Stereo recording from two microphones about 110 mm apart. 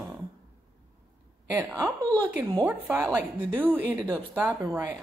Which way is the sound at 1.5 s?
20° right (ahead or behind).